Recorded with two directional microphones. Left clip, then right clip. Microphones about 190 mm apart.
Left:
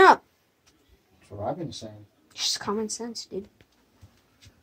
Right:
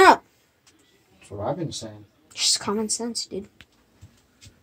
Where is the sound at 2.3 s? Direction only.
10° right (ahead or behind).